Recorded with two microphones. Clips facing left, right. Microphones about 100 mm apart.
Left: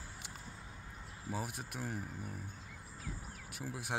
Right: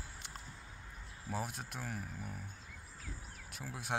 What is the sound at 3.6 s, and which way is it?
Speech, 5° left (ahead or behind).